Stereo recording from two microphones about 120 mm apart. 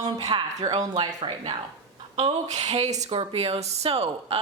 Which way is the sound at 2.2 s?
65° right (ahead or behind).